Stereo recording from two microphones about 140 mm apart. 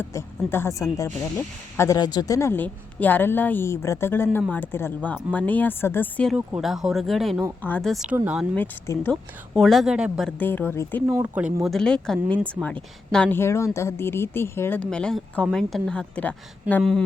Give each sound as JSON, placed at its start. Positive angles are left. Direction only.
{"t": 0.0, "sound": "speech", "side_deg": 20}
{"t": 1.4, "sound": "a woman's voice", "side_deg": 10}
{"t": 1.9, "sound": "a woman's voice", "side_deg": 30}
{"t": 6.6, "sound": "a woman's voice", "side_deg": 0}
{"t": 8.1, "sound": "speech", "side_deg": -15}
{"t": 8.5, "sound": "a woman's voice", "side_deg": 15}
{"t": 9.6, "sound": "a woman's voice", "side_deg": 0}
{"t": 10.2, "sound": "a woman's voice", "side_deg": 10}
{"t": 11.0, "sound": "speech", "side_deg": -15}
{"t": 11.6, "sound": "a woman's voice", "side_deg": 5}
{"t": 13.4, "sound": "a woman's voice", "side_deg": 20}